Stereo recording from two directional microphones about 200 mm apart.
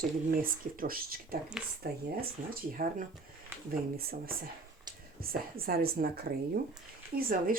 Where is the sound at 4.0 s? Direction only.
50° right (ahead or behind).